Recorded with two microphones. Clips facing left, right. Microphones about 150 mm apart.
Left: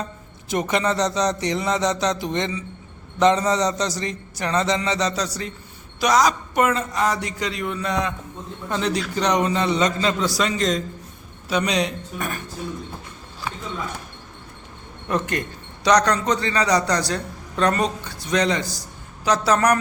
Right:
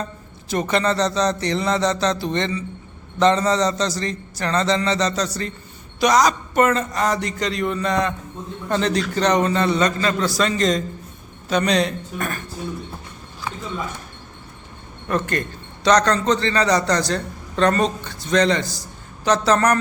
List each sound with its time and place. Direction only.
0.4 s a man's voice: 15° left (ahead or behind)
10.6 s a man's voice: centre (ahead or behind)
15.0 s a man's voice: 15° left (ahead or behind)